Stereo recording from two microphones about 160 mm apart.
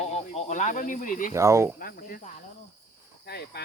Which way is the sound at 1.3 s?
15° right (ahead or behind).